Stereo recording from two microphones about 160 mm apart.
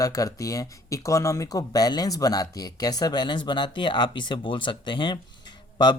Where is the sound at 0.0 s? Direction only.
20° left (ahead or behind).